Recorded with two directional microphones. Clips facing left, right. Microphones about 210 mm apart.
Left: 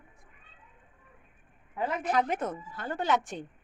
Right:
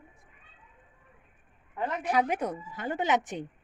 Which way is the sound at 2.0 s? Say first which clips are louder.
Right 2 dB; 10° right (ahead or behind).